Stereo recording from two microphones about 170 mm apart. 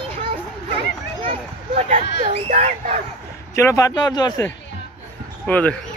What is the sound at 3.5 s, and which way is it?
Speech, 15° left (ahead or behind).